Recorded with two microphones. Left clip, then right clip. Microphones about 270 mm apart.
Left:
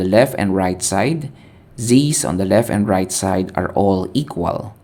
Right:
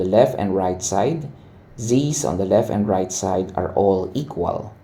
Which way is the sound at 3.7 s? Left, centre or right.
Left.